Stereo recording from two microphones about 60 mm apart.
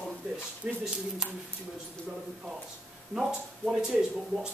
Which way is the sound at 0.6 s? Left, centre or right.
Right.